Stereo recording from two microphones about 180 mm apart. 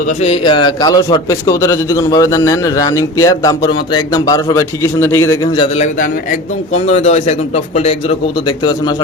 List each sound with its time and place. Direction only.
0.2 s a man's voice: 30° left (ahead or behind)
5.5 s a man's voice: 35° left (ahead or behind)
8.6 s a man's voice: 20° left (ahead or behind)